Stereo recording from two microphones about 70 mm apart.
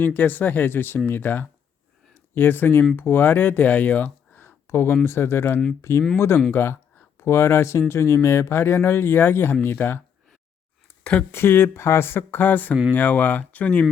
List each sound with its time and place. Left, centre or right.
0.0 s speech: left
11.0 s speech: centre
11.3 s speech: left